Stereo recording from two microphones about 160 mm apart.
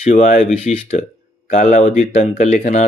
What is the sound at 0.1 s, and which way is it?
Speech, 55° left (ahead or behind).